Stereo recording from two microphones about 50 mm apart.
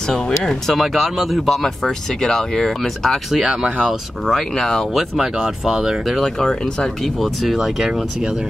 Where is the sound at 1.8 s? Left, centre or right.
Centre.